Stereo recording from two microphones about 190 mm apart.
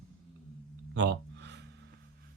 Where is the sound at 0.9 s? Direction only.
65° right (ahead or behind).